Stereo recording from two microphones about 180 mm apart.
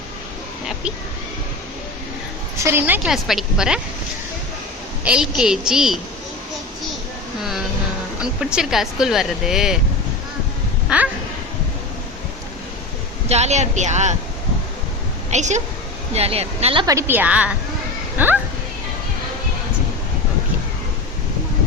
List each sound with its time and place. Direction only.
2.7 s speech: 10° right (ahead or behind)
5.0 s speech: 5° right (ahead or behind)
8.2 s speech: 5° right (ahead or behind)
10.8 s quack: 5° right (ahead or behind)
13.2 s speech: 35° right (ahead or behind)
15.3 s speech: 40° right (ahead or behind)
16.8 s a woman's voice: 15° right (ahead or behind)